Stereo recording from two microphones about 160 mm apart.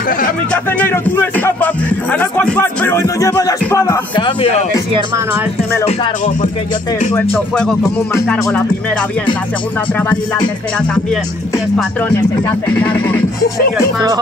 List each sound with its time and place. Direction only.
0.5 s music: 10° left (ahead or behind)
4.1 s speech: 30° left (ahead or behind)
5.9 s music: 55° left (ahead or behind)
7.3 s speech: 5° left (ahead or behind)
12.6 s music: 10° left (ahead or behind)
13.9 s speech: 25° right (ahead or behind)